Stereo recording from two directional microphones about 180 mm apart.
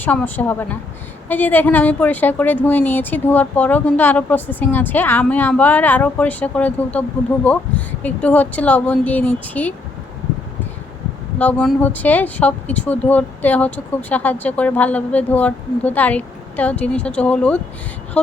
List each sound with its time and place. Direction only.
0.0 s speech: 10° left (ahead or behind)
11.3 s speech: 10° left (ahead or behind)